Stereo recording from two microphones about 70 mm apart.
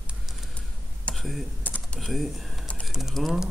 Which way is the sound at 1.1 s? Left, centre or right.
Centre.